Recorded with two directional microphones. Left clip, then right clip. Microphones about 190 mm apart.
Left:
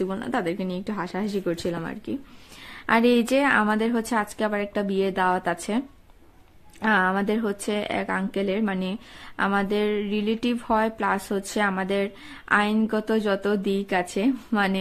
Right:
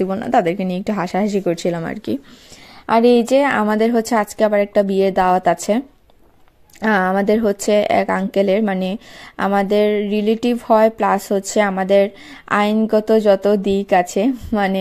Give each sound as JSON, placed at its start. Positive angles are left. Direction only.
{"t": 0.0, "sound": "speech", "side_deg": -35}
{"t": 2.9, "sound": "speech", "side_deg": -15}